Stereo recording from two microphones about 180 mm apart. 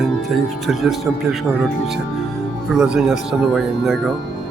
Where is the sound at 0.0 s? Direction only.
Centre (ahead or behind).